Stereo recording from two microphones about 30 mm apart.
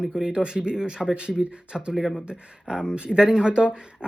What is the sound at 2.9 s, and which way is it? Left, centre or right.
Speech, right.